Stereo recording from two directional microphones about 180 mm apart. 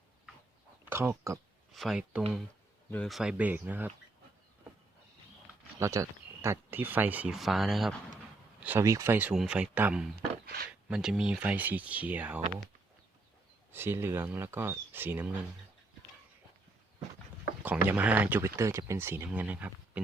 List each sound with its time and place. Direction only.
0.9 s speech: 15° right (ahead or behind)
1.7 s speech: centre (ahead or behind)
5.8 s speech: 15° right (ahead or behind); by 7.9 s centre (ahead or behind)
8.6 s speech: 15° right (ahead or behind)
10.4 s a sound: 60° right (ahead or behind)
10.8 s speech: 5° right (ahead or behind)
13.7 s speech: 15° right (ahead or behind)
17.6 s speech: 10° right (ahead or behind)